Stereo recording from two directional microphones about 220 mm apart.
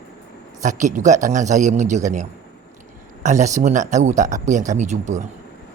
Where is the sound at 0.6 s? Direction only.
35° right (ahead or behind).